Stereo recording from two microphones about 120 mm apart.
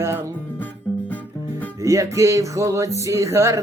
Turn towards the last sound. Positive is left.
turn(degrees=-25)  # may be behind; listen again after turning